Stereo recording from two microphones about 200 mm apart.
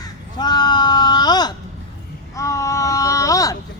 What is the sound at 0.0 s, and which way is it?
Crow, 20° left (ahead or behind).